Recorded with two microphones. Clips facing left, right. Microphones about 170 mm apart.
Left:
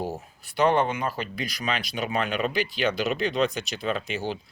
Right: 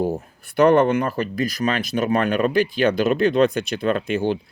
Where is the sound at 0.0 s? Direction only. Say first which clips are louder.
Right 8 dB; 50° right (ahead or behind).